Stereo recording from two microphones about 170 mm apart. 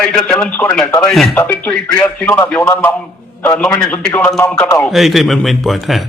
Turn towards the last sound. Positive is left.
turn(degrees=0)  # may be behind; listen again after turning